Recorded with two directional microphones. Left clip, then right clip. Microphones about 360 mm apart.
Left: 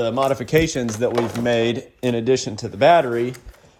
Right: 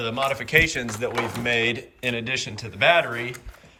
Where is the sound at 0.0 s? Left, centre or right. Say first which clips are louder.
Left 5 dB; centre.